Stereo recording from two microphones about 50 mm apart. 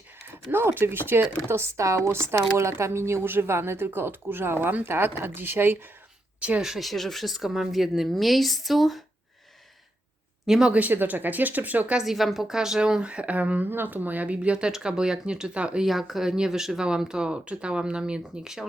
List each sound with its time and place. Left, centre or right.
0.5 s speech: right
6.6 s a woman's voice: centre
10.4 s speech: centre
10.7 s speech: right
11.9 s speech: centre
13.0 s speech: right
15.8 s a woman's voice: centre